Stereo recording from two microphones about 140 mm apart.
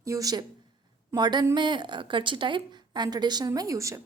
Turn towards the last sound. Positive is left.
turn(degrees=-20)  # may be behind; listen again after turning